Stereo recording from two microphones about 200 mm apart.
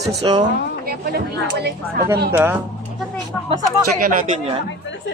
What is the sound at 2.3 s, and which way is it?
Speech, 10° right (ahead or behind).